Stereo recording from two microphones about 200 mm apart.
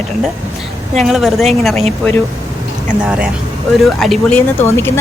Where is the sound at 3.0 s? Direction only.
5° right (ahead or behind).